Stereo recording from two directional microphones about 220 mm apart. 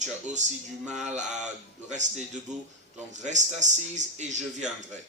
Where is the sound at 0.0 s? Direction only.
35° right (ahead or behind).